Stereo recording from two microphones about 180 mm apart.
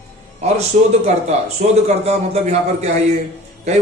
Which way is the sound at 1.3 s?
40° right (ahead or behind).